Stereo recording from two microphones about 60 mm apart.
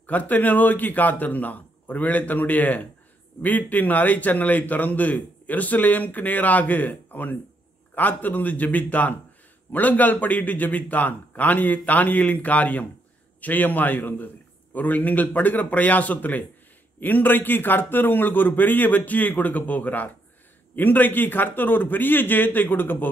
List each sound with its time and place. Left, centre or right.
0.0 s a man's voice: left